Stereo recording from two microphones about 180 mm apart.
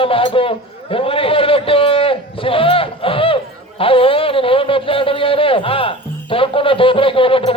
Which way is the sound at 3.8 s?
30° left (ahead or behind).